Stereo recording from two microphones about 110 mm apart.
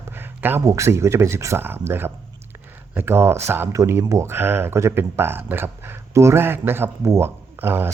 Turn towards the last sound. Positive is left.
turn(degrees=-20)  # may be behind; listen again after turning